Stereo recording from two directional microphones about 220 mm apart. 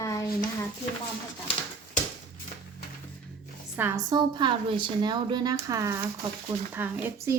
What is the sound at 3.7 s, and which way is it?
A woman's voice, 10° right (ahead or behind).